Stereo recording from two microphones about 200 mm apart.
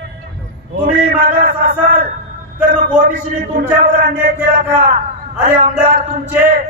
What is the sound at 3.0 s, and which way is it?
Speech, 40° right (ahead or behind).